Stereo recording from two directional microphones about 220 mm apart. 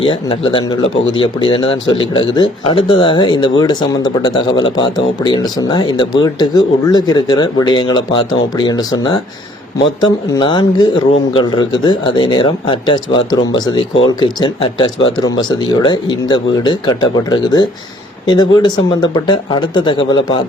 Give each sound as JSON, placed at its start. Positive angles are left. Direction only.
{"t": 0.0, "sound": "speech", "side_deg": 25}